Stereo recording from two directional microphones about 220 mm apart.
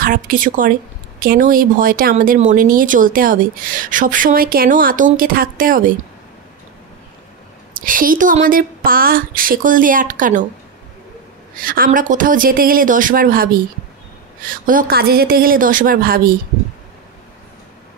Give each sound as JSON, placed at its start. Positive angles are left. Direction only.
{"t": 0.0, "sound": "speech", "side_deg": -40}
{"t": 7.7, "sound": "speech", "side_deg": -40}
{"t": 11.5, "sound": "speech", "side_deg": -40}